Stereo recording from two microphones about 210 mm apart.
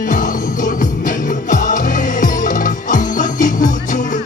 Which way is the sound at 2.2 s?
40° left (ahead or behind).